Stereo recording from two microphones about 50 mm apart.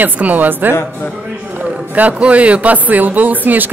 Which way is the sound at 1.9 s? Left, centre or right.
Right.